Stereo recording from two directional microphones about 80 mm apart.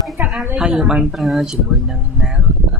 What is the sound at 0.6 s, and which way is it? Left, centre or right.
Speech, centre.